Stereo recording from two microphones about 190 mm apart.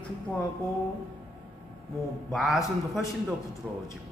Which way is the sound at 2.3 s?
Centre (ahead or behind).